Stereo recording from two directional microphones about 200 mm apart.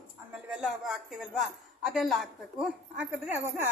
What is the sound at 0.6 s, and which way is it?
A woman's voice, centre (ahead or behind).